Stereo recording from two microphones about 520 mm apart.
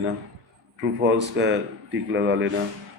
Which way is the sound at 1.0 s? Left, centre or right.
Centre.